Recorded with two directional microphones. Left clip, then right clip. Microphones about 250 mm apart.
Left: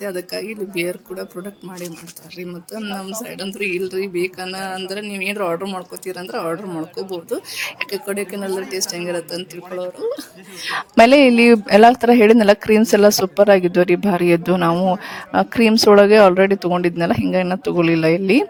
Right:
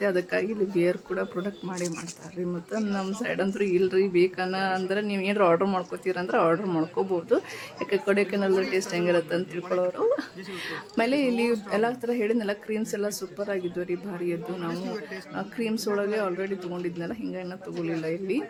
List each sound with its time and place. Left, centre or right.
0.0 s speech: centre
3.0 s speech: centre
7.5 s speech: left
7.9 s speech: centre
10.6 s speech: left